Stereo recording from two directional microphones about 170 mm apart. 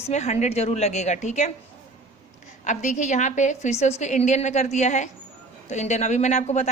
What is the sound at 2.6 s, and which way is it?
Speech, 45° left (ahead or behind).